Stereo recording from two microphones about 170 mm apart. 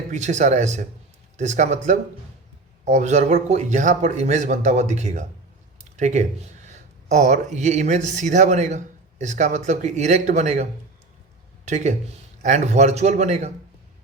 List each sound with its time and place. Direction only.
0.1 s speech: 45° right (ahead or behind)